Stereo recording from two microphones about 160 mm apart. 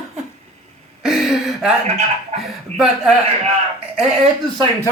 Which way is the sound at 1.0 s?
Centre (ahead or behind).